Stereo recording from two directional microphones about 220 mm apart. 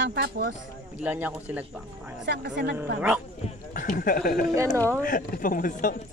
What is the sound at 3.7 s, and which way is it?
Speech, 35° left (ahead or behind).